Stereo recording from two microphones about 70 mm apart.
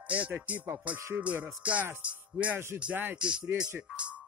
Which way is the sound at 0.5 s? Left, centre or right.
Right.